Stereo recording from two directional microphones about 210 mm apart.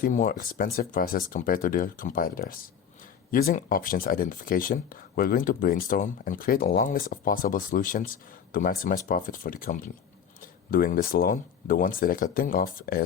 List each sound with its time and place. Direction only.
0.0 s speech: 40° left (ahead or behind)